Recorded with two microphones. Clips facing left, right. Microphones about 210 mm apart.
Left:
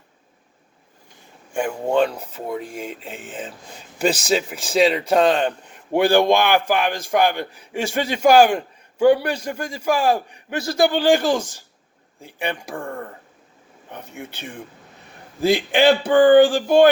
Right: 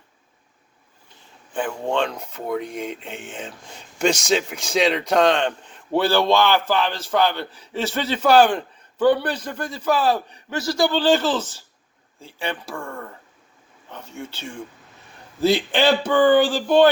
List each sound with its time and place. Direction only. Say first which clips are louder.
1.5 s speech: left 4 dB; 10° left (ahead or behind)
12.7 s speech: left 3 dB; 35° left (ahead or behind)
13.9 s speech: even; 15° left (ahead or behind)
16.3 s speech: left 5 dB; 50° left (ahead or behind)
16.6 s speech: left 2 dB; 10° left (ahead or behind)